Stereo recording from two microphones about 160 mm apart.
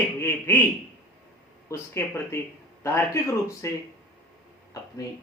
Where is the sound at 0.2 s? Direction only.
15° left (ahead or behind).